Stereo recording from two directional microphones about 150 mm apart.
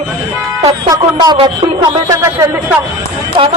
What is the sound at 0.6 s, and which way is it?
Speech, 25° right (ahead or behind).